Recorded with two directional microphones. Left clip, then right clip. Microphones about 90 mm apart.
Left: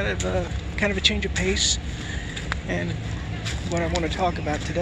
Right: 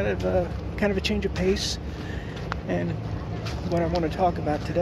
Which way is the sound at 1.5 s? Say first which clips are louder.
Left 3 dB; 45° right (ahead or behind).